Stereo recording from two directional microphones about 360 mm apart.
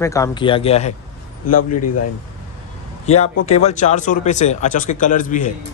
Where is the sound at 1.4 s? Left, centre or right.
Left.